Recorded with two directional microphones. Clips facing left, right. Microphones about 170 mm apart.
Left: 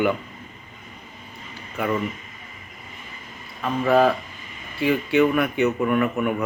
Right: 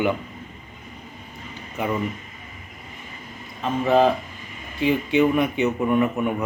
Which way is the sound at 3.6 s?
20° right (ahead or behind).